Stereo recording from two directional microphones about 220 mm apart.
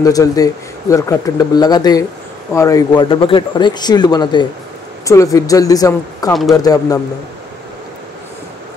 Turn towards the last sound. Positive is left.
turn(degrees=15)  # may be behind; listen again after turning